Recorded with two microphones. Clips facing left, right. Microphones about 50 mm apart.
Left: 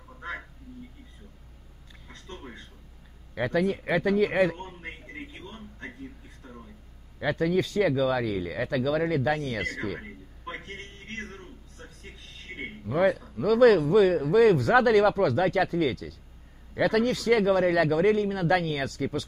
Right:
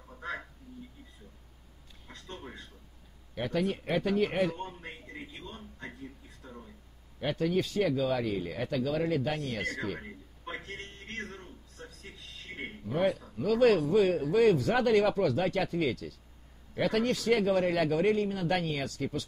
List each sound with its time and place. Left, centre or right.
3.4 s speech: left
4.5 s speech: left
5.0 s a sound: left
7.3 s speech: left
7.8 s speech: left
9.6 s speech: left
10.5 s music: left
12.4 s a sound: left
12.9 s speech: left
13.4 s speech: left
17.1 s speech: left
18.0 s speech: left
18.3 s speech: left